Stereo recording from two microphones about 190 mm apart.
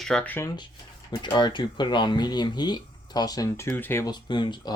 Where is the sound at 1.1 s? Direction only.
25° left (ahead or behind).